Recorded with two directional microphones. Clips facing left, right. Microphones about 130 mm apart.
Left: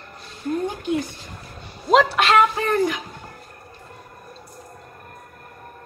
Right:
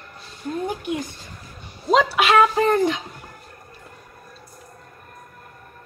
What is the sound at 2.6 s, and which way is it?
Speech, 25° right (ahead or behind).